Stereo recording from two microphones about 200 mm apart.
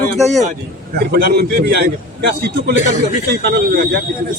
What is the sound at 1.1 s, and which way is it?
Speech, 50° right (ahead or behind).